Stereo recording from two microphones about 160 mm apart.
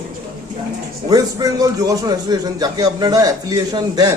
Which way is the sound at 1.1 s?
20° right (ahead or behind).